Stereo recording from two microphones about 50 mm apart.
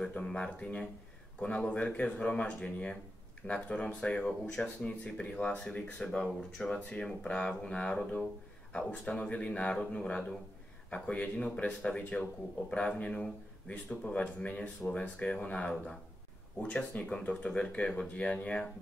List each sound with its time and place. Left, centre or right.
0.2 s speech: centre
11.8 s speech: centre
14.0 s speech: left